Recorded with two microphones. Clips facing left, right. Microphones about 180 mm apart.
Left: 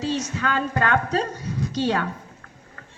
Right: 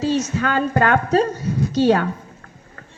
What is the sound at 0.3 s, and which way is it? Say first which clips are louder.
Speech: right 5 dB; 40° right (ahead or behind).